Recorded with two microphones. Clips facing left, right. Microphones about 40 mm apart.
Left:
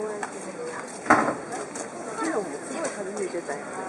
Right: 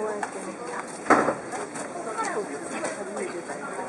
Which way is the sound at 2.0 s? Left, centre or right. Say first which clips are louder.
Left 2 dB; centre.